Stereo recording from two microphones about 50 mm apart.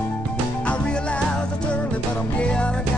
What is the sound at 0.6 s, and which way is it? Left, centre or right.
Music, left.